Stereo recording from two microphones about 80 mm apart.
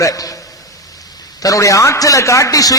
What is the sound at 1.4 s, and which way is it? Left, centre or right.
A man's voice, left.